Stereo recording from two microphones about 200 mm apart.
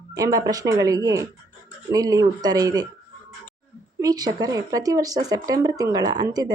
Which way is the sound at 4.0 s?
20° right (ahead or behind).